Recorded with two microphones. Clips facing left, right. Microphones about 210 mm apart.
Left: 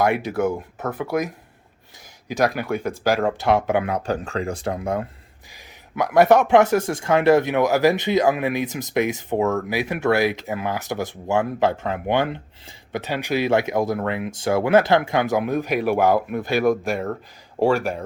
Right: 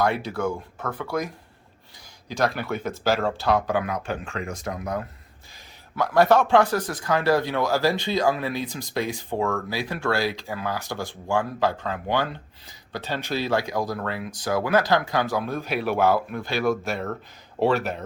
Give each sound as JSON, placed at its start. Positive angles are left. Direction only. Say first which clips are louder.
{"t": 0.0, "sound": "speech", "louder": "left 4 dB", "side_deg": 20}
{"t": 2.2, "sound": "speech", "louder": "left 4 dB", "side_deg": 15}
{"t": 16.4, "sound": "speech", "louder": "left 5 dB", "side_deg": 50}
{"t": 16.6, "sound": "speech", "louder": "left 2 dB", "side_deg": 15}